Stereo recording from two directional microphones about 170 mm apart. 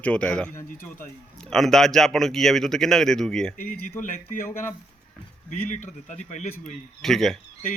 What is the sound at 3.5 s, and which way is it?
Speech, 55° left (ahead or behind).